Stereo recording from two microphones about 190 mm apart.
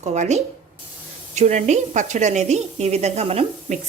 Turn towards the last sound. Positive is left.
turn(degrees=-35)  # may be behind; listen again after turning